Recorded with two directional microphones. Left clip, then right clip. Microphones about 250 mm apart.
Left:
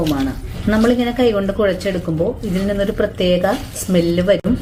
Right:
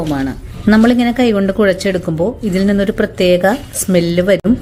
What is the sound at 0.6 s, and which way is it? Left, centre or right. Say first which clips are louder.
A woman's voice: right 4 dB; right.